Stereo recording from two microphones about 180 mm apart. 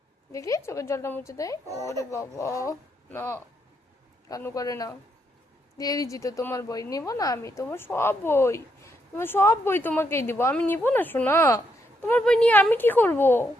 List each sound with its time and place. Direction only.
0.3 s a woman's voice: 20° left (ahead or behind)